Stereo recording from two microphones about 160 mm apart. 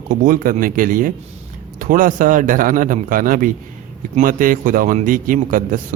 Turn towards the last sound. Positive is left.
turn(degrees=-55)  # may be behind; listen again after turning